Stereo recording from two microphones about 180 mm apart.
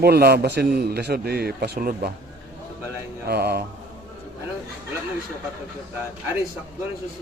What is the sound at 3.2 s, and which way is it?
Speech, 60° right (ahead or behind).